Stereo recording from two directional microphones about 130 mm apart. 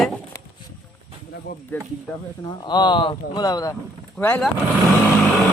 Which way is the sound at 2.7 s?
35° left (ahead or behind).